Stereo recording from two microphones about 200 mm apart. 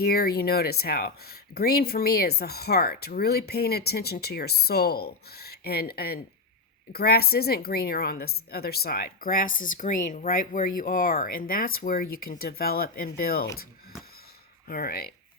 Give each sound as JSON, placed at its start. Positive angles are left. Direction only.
{"t": 0.0, "sound": "speech", "side_deg": 50}
{"t": 14.7, "sound": "speech", "side_deg": 50}